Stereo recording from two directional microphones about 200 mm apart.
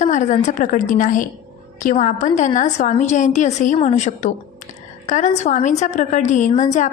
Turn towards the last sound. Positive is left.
turn(degrees=35)  # may be behind; listen again after turning